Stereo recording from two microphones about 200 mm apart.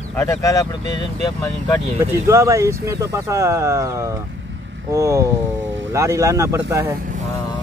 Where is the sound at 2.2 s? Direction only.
15° right (ahead or behind).